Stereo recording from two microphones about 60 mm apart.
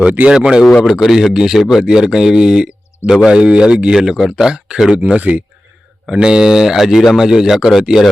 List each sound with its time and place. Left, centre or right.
0.3 s speech: centre
4.9 s speech: right; by 8.1 s centre